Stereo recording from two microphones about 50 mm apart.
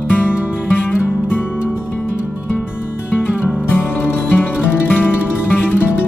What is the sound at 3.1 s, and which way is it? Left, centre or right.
Music, left.